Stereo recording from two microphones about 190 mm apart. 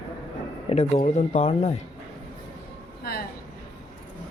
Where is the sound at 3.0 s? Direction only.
55° left (ahead or behind).